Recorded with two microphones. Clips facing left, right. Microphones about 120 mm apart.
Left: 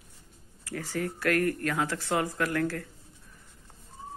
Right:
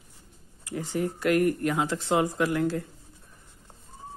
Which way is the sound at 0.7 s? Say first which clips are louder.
Right 3 dB; 20° right (ahead or behind).